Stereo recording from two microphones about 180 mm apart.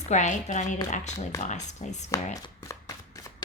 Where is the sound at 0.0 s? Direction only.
40° left (ahead or behind).